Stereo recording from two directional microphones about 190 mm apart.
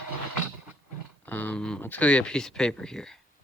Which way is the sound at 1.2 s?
10° left (ahead or behind).